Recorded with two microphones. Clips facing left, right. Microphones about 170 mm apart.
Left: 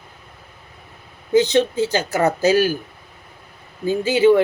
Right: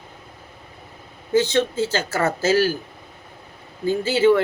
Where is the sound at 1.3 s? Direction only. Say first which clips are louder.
Left 3 dB; 15° left (ahead or behind).